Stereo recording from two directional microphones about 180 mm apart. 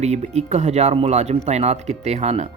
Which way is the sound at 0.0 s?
40° right (ahead or behind).